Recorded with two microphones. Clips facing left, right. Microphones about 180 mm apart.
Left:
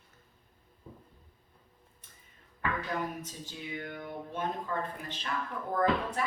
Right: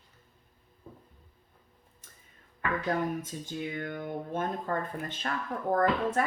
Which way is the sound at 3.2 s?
50° right (ahead or behind).